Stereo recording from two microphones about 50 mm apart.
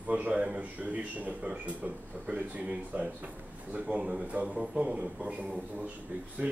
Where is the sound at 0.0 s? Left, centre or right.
Right.